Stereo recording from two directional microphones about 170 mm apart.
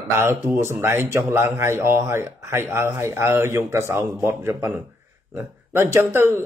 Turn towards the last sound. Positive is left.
turn(degrees=-15)  # may be behind; listen again after turning